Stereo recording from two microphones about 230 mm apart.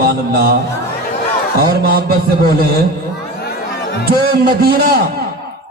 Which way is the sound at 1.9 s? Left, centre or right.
Right.